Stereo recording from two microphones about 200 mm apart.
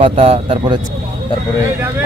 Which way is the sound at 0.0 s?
30° right (ahead or behind).